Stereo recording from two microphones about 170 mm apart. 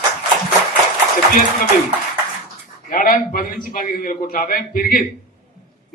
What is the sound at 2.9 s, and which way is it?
A man's voice, 55° left (ahead or behind).